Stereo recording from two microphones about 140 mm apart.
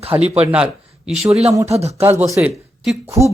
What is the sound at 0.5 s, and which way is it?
Speech, 5° right (ahead or behind).